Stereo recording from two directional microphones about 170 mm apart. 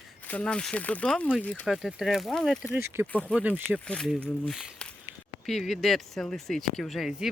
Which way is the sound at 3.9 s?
5° left (ahead or behind).